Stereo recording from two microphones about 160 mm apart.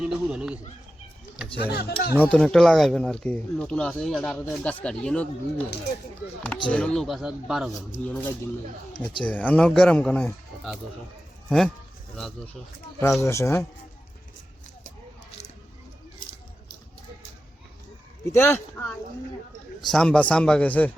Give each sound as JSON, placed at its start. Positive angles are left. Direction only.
{"t": 0.0, "sound": "speech", "side_deg": -5}
{"t": 1.7, "sound": "speech", "side_deg": 80}
{"t": 2.3, "sound": "speech", "side_deg": 5}
{"t": 6.7, "sound": "speech", "side_deg": 5}
{"t": 8.0, "sound": "speech", "side_deg": 10}
{"t": 13.0, "sound": "speech", "side_deg": 15}
{"t": 18.3, "sound": "speech", "side_deg": 15}